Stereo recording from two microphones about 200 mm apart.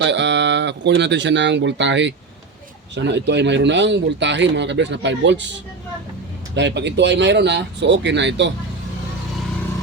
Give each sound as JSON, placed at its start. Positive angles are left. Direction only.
{"t": 0.0, "sound": "speech", "side_deg": -60}